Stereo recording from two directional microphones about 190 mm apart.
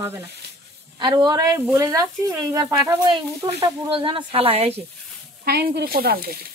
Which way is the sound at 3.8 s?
25° right (ahead or behind).